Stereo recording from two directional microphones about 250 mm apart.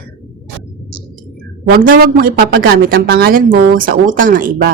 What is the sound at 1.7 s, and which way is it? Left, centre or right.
Speech, right.